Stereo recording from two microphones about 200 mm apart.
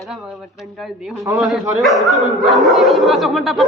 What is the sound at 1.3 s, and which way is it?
Speech, centre (ahead or behind).